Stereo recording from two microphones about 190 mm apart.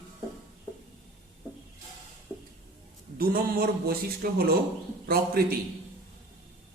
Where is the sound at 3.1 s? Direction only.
50° right (ahead or behind).